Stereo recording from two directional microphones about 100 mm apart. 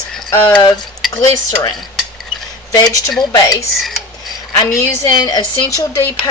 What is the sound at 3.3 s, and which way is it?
Speech, 40° left (ahead or behind).